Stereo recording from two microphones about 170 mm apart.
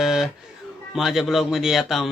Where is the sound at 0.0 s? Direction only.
Centre (ahead or behind).